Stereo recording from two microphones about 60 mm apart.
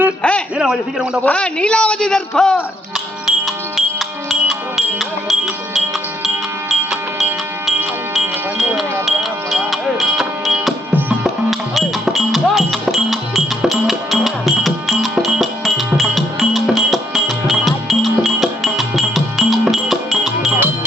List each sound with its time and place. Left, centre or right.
0.2 s a man's voice: centre
0.6 s a man's voice: centre
1.2 s a man's voice: centre
3.2 s music: centre
4.9 s music: centre
8.1 s wind chime: centre
11.7 s music: centre